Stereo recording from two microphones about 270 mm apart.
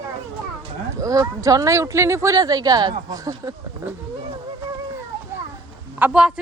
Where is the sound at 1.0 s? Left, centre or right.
Centre.